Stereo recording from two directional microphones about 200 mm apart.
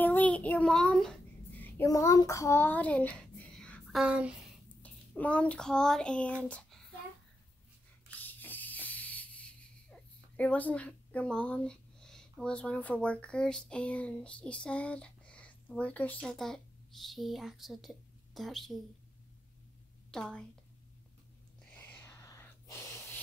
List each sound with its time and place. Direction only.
0.0 s child singing: 10° left (ahead or behind)
1.6 s a child's voice: 15° left (ahead or behind)
4.0 s a child's voice: 5° right (ahead or behind)
8.2 s a sound: 10° left (ahead or behind)
20.1 s a woman's voice: 5° left (ahead or behind)
21.6 s a sound: 5° left (ahead or behind)